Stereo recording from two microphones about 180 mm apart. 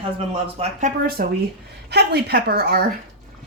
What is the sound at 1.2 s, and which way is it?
Speech, 60° right (ahead or behind).